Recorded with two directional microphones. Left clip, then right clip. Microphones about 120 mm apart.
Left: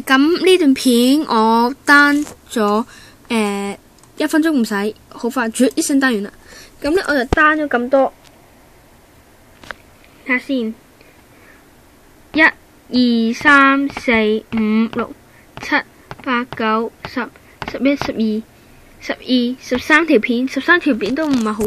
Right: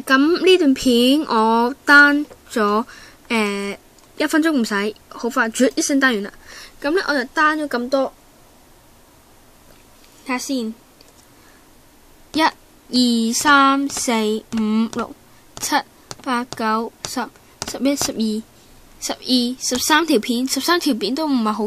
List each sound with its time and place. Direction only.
0.0 s speech: 5° right (ahead or behind)
10.2 s a woman's voice: 30° right (ahead or behind)
12.4 s a woman's voice: 40° right (ahead or behind)
14.9 s a woman's voice: 20° right (ahead or behind)
15.5 s a woman's voice: 40° right (ahead or behind)